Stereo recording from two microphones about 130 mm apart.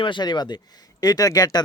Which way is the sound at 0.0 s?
35° left (ahead or behind).